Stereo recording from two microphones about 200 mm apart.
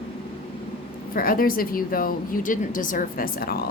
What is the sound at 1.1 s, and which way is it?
A woman's voice, 45° left (ahead or behind).